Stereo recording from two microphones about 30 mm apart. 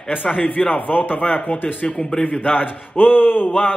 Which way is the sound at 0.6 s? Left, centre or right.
Left.